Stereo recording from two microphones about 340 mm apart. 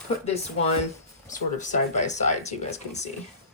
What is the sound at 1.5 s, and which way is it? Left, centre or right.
Speech, left.